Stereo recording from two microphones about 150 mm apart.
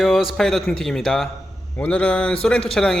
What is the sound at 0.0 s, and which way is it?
Speech, centre (ahead or behind).